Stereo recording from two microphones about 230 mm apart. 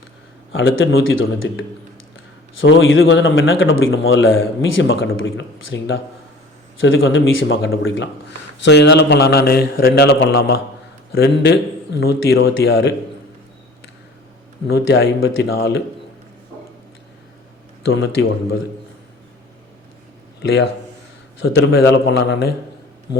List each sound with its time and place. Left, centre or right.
0.5 s a man's voice: left
14.7 s a man's voice: left
17.9 s a man's voice: left
21.4 s a man's voice: left